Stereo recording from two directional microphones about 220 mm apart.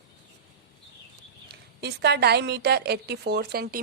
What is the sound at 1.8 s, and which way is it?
A woman's voice, 50° right (ahead or behind).